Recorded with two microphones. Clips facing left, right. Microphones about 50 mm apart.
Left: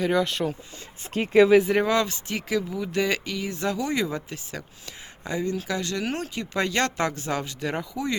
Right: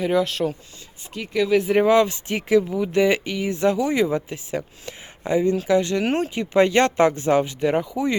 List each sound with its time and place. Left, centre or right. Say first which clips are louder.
0.0 s speech: right 3 dB; centre
1.1 s speech: left 5 dB; left
1.5 s speech: even; centre
1.8 s speech: right 6 dB; centre
2.6 s speech: right 6 dB; centre